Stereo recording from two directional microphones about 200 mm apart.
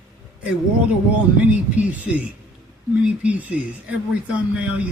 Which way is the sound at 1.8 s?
5° right (ahead or behind).